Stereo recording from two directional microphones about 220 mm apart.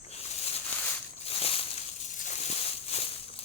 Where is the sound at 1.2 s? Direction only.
25° left (ahead or behind).